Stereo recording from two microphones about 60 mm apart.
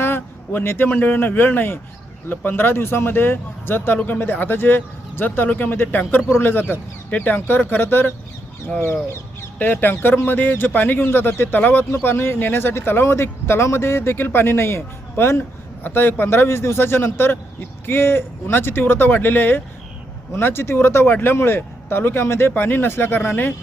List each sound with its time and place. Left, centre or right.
0.0 s a sound: left
0.9 s speech: left
5.7 s speech: left
9.6 s speech: left